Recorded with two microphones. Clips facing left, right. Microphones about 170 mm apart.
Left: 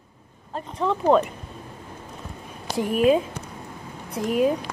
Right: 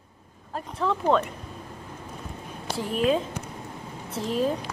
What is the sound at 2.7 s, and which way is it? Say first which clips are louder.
A woman's voice: left 5 dB; 10° left (ahead or behind).